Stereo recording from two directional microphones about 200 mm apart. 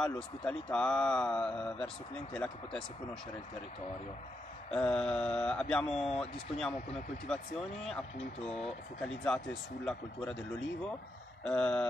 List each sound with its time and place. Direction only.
0.0 s speech: 5° left (ahead or behind)
4.7 s speech: 5° left (ahead or behind)
9.0 s speech: 5° left (ahead or behind)
11.4 s speech: 5° left (ahead or behind)